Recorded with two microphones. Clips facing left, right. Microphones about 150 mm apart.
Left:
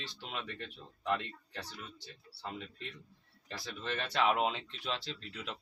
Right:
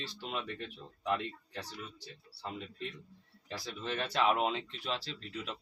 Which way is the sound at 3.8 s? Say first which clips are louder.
Right 1 dB; 5° right (ahead or behind).